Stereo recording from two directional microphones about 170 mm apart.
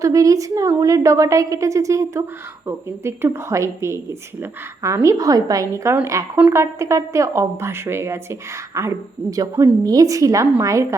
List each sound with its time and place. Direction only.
0.0 s a woman's voice: 20° right (ahead or behind)
9.3 s a woman's voice: 20° right (ahead or behind)